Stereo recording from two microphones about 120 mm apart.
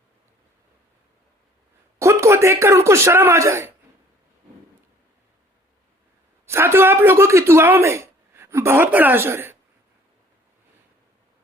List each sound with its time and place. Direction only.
2.0 s a man's voice: 25° right (ahead or behind)
6.4 s speech: 20° right (ahead or behind)